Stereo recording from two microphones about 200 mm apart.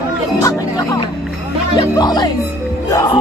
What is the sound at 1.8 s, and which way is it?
Speech, 20° left (ahead or behind).